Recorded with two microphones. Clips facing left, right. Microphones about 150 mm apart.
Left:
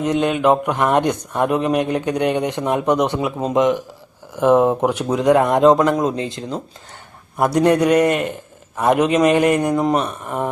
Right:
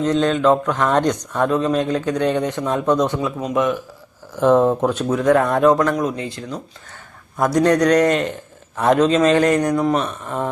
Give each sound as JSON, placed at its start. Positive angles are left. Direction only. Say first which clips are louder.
{"t": 0.0, "sound": "speech", "louder": "right 1 dB", "side_deg": 15}
{"t": 3.3, "sound": "speech", "louder": "left 3 dB", "side_deg": 25}
{"t": 7.3, "sound": "speech", "louder": "left 1 dB", "side_deg": 10}